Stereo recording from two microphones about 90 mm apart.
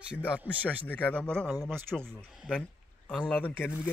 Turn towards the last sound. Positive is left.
turn(degrees=20)  # may be behind; listen again after turning